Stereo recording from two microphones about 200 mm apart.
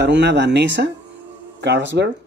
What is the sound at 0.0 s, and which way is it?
Speech, 60° right (ahead or behind).